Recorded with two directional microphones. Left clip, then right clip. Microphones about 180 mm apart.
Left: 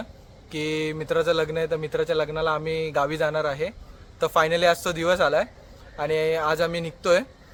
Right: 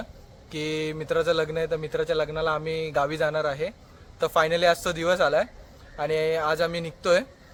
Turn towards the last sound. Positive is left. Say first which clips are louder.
# left 1 dB
turn(degrees=10)  # may be behind; listen again after turning